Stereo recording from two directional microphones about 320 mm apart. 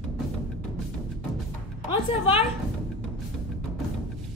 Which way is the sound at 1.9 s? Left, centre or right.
Centre.